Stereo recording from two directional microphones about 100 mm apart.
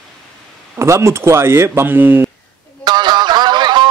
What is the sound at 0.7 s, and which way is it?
A man's voice, 30° right (ahead or behind).